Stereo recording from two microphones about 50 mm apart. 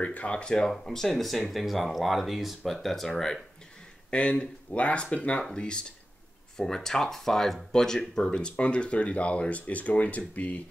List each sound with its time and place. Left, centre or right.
0.0 s speech: left
0.8 s speech: centre
4.1 s speech: left
8.4 s speech: left